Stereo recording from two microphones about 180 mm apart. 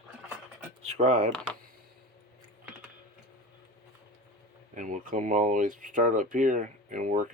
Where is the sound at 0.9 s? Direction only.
40° right (ahead or behind).